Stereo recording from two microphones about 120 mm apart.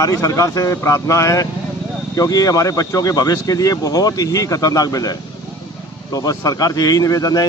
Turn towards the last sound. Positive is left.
turn(degrees=30)  # may be behind; listen again after turning